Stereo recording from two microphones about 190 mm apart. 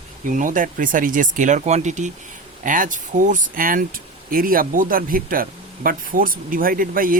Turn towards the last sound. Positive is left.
turn(degrees=-50)  # may be behind; listen again after turning